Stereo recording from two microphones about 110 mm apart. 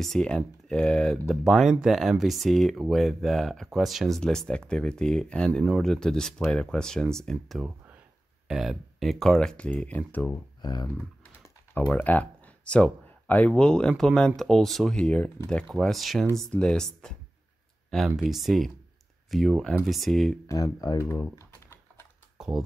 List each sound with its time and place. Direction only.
0.0 s speech: 5° left (ahead or behind)
10.6 s speech: 40° left (ahead or behind)
11.9 s speech: 15° left (ahead or behind)
20.4 s typing: 30° left (ahead or behind)
22.4 s computer keyboard: 5° right (ahead or behind)